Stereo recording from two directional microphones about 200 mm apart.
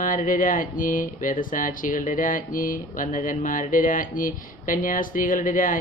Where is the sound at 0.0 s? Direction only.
40° left (ahead or behind).